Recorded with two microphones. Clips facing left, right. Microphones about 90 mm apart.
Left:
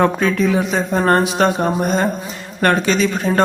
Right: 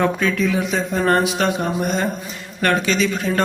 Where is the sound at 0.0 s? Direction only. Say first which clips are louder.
Left 3 dB; 40° left (ahead or behind).